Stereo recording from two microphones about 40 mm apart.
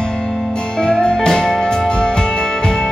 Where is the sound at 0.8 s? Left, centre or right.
Left.